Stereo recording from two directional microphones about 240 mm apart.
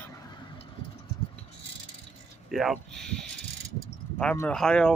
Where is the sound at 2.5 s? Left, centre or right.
Centre.